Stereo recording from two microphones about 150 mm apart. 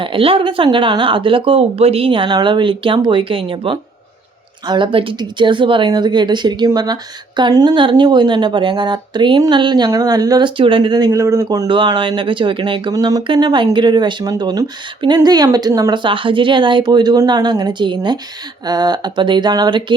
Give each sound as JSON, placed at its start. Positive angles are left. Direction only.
{"t": 0.0, "sound": "a woman's voice", "side_deg": -35}